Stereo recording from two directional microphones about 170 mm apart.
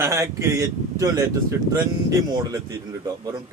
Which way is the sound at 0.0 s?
15° right (ahead or behind).